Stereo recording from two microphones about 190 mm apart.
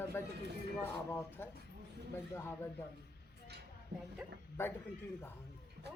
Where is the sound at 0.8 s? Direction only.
10° left (ahead or behind).